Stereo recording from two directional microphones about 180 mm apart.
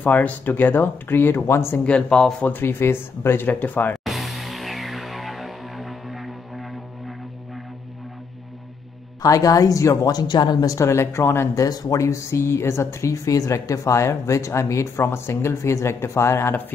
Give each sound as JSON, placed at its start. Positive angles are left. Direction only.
{"t": 0.0, "sound": "speech", "side_deg": 10}
{"t": 4.0, "sound": "music", "side_deg": 0}
{"t": 9.2, "sound": "speech", "side_deg": 20}